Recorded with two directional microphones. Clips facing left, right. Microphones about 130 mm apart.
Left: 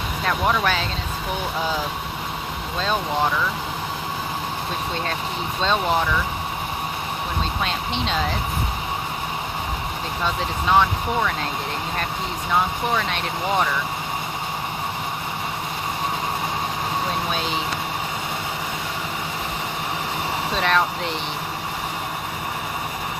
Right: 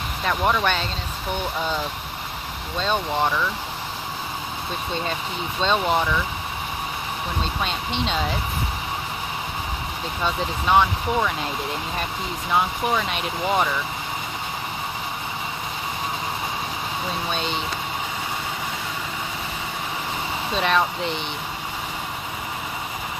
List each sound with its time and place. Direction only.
0.3 s speech: centre (ahead or behind)
2.7 s speech: centre (ahead or behind)
5.5 s speech: centre (ahead or behind)
7.6 s speech: centre (ahead or behind)
10.2 s speech: centre (ahead or behind)
12.5 s speech: 5° right (ahead or behind)
17.3 s speech: centre (ahead or behind)
20.6 s speech: centre (ahead or behind)